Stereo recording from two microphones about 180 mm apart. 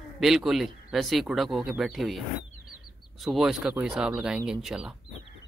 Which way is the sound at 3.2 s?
Centre (ahead or behind).